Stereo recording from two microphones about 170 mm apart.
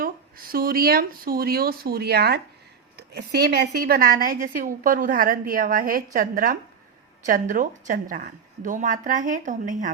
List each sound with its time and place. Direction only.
0.0 s a woman's voice: 60° right (ahead or behind)